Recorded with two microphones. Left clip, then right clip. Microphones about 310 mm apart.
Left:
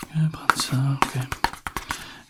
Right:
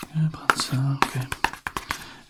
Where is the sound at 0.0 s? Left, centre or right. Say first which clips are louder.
Left 1 dB; left.